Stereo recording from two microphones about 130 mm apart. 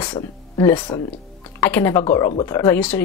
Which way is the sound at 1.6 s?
15° left (ahead or behind).